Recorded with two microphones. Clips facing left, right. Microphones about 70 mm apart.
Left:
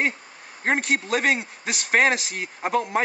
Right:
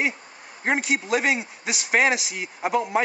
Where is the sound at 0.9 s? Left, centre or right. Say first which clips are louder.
Even; centre.